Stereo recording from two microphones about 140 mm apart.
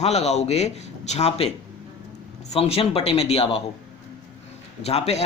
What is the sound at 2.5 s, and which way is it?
Speech, 45° left (ahead or behind).